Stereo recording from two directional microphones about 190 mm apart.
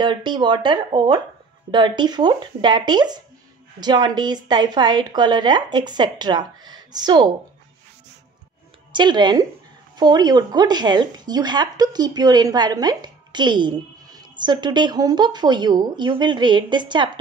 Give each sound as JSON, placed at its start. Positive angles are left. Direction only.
{"t": 0.0, "sound": "speech", "side_deg": -25}
{"t": 8.9, "sound": "speech", "side_deg": -25}